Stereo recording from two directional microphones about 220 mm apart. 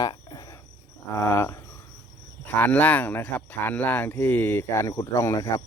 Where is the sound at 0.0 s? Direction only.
20° left (ahead or behind).